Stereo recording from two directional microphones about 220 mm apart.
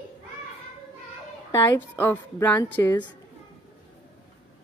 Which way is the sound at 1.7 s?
10° left (ahead or behind).